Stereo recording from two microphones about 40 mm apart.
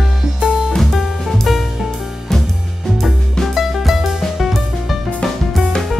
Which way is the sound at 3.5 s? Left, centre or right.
Centre.